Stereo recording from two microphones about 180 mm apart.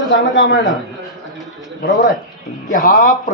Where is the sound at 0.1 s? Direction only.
90° left.